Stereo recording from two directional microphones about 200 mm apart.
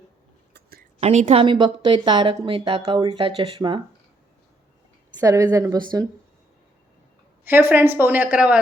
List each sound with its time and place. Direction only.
0.9 s a woman's voice: 35° right (ahead or behind)
5.2 s a woman's voice: 15° right (ahead or behind)
7.4 s a woman's voice: 10° right (ahead or behind)